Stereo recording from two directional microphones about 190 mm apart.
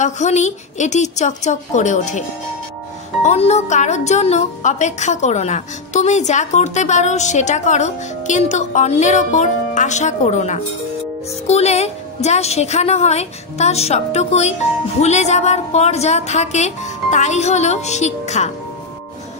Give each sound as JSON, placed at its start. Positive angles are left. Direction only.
{"t": 0.0, "sound": "a woman's voice", "side_deg": 40}
{"t": 3.3, "sound": "a woman's voice", "side_deg": 35}